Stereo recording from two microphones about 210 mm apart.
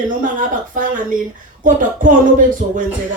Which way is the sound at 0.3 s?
40° right (ahead or behind).